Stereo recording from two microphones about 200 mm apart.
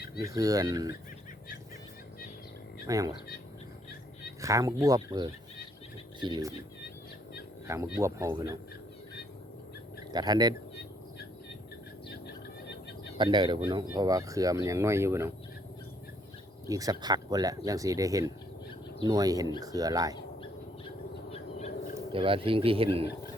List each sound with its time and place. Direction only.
0.2 s speech: 15° right (ahead or behind)
2.8 s speech: 15° right (ahead or behind)
4.4 s speech: 15° right (ahead or behind)
7.9 s speech: 15° right (ahead or behind)
10.1 s speech: 20° right (ahead or behind)
13.1 s speech: 20° right (ahead or behind)
16.6 s speech: 15° right (ahead or behind)
20.8 s owl: 30° left (ahead or behind)
22.1 s speech: 25° right (ahead or behind)